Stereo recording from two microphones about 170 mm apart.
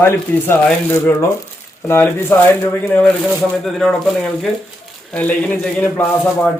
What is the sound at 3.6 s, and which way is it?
A man's voice, centre (ahead or behind).